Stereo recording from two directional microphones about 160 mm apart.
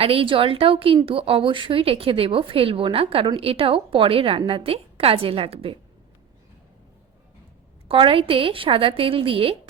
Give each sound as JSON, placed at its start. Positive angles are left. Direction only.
{"t": 0.0, "sound": "a woman's voice", "side_deg": -35}
{"t": 7.9, "sound": "a woman's voice", "side_deg": -35}